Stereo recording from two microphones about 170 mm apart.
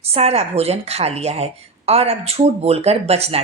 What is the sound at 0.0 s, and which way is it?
A woman's voice, 35° right (ahead or behind).